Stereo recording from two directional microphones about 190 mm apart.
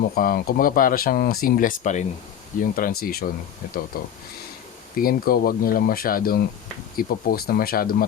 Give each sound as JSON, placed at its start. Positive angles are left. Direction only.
{"t": 0.2, "sound": "speech", "side_deg": 50}